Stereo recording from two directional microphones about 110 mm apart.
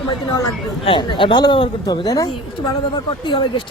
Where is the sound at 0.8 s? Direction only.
50° left (ahead or behind).